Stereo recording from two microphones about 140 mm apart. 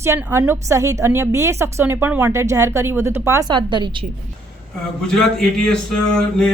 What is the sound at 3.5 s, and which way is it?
Speech, 35° right (ahead or behind).